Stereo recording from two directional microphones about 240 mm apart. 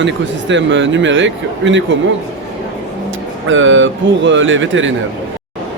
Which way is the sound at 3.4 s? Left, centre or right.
Right.